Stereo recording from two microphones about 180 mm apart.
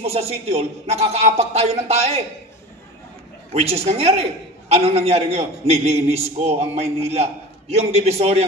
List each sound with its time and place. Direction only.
0.0 s a man's voice: 35° right (ahead or behind)
3.5 s a man's voice: 35° right (ahead or behind)